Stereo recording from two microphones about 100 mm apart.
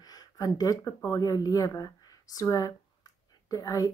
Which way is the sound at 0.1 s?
40° left (ahead or behind).